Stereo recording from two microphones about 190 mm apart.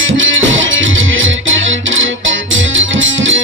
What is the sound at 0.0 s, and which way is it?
Music, 90° right.